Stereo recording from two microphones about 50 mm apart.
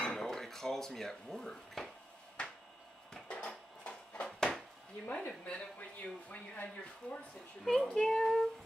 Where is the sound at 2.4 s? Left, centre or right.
Left.